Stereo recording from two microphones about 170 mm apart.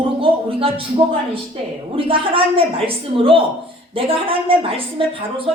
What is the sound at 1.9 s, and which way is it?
A woman's voice, 30° right (ahead or behind).